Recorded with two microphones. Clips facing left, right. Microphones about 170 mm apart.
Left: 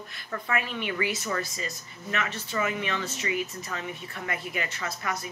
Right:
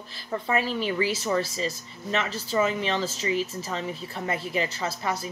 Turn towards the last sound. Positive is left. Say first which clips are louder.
# right 4 dB
turn(degrees=-30)  # may be behind; listen again after turning